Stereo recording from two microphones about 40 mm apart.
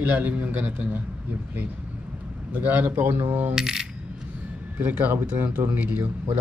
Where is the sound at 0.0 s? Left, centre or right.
Right.